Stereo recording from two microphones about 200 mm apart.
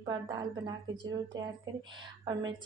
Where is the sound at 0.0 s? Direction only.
20° right (ahead or behind).